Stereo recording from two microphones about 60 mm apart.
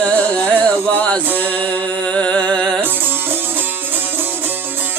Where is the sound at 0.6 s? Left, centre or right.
Centre.